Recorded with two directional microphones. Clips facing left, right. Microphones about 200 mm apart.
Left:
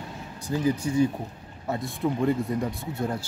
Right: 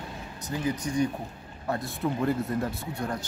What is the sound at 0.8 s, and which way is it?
Speech, 25° left (ahead or behind).